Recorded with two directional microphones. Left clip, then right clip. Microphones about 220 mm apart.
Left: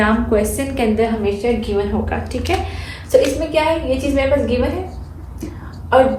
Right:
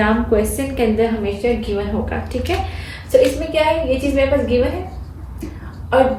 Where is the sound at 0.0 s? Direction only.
25° left (ahead or behind).